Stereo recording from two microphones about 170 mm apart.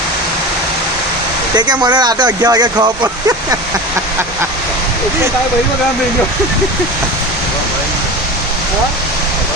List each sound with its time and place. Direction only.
1.5 s speech: 25° right (ahead or behind)